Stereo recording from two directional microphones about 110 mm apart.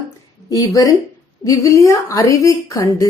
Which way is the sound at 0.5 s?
30° left (ahead or behind).